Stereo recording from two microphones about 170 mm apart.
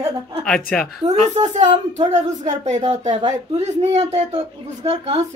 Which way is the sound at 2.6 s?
45° right (ahead or behind).